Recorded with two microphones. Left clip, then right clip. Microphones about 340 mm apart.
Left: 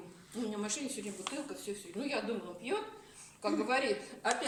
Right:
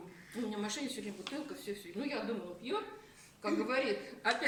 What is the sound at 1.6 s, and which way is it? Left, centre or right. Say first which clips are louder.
Speech: left 1 dB; centre.